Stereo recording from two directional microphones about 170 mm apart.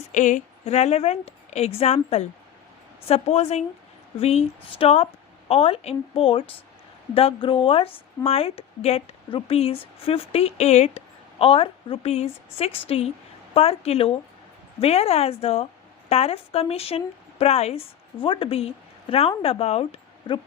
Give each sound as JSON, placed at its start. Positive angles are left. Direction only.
{"t": 0.1, "sound": "a woman's voice", "side_deg": 45}